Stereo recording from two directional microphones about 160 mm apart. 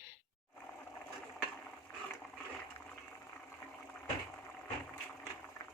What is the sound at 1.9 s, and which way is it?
Ratchet, 15° left (ahead or behind).